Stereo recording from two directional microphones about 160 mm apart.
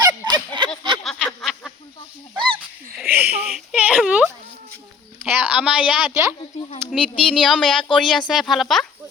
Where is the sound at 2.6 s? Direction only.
Centre (ahead or behind).